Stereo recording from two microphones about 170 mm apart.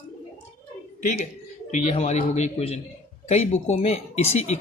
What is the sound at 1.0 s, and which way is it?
Speech, 50° left (ahead or behind).